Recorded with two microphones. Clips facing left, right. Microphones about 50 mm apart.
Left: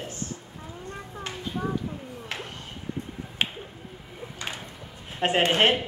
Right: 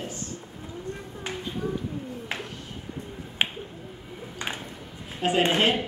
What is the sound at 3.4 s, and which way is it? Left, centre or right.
Finger snapping, centre.